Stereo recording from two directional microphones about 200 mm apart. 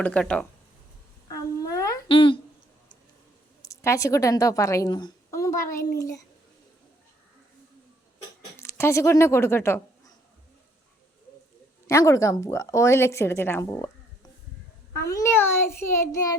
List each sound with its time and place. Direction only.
0.0 s speech: 5° left (ahead or behind)
1.3 s humming: 15° left (ahead or behind)
3.7 s a woman's voice: 15° left (ahead or behind)
8.5 s speech: 15° left (ahead or behind)
11.9 s speech: 15° left (ahead or behind)